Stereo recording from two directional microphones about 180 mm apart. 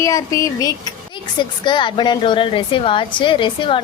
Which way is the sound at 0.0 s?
20° left (ahead or behind).